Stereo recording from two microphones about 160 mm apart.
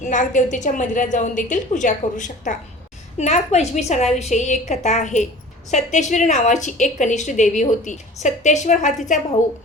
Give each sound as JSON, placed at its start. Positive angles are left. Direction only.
{"t": 0.0, "sound": "a woman's voice", "side_deg": 50}